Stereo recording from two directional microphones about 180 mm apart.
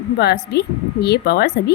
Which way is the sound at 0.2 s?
65° left (ahead or behind).